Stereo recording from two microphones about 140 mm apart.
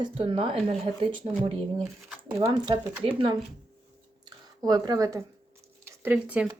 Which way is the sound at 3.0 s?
40° right (ahead or behind).